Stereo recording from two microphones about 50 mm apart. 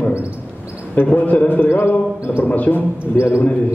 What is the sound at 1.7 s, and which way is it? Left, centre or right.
Mantra, left.